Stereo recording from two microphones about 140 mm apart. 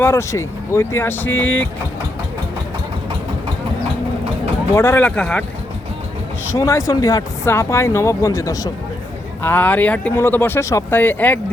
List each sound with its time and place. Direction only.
0.0 s speech: 20° left (ahead or behind)
4.7 s speech: 15° left (ahead or behind)
6.5 s speech: 20° left (ahead or behind)
9.4 s speech: 15° left (ahead or behind)